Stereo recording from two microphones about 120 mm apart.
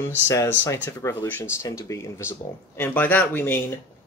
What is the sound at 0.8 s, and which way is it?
Speech, 25° left (ahead or behind).